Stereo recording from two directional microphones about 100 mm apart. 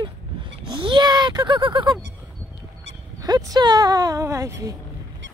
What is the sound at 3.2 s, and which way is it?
Speech, 40° right (ahead or behind).